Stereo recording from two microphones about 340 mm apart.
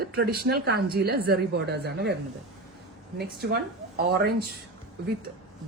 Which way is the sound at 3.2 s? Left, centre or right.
Right.